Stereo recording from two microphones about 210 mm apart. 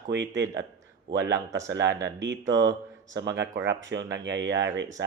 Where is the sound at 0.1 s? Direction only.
55° right (ahead or behind).